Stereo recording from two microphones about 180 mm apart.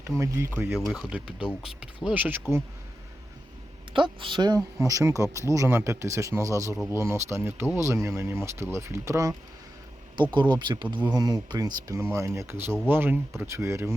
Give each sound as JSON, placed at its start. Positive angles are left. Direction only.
{"t": 0.2, "sound": "speech", "side_deg": -15}
{"t": 0.8, "sound": "speech", "side_deg": 0}
{"t": 3.9, "sound": "speech", "side_deg": -25}
{"t": 10.5, "sound": "speech", "side_deg": -25}